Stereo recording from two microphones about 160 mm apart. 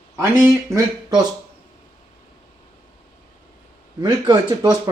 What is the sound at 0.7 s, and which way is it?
Speech, 25° right (ahead or behind).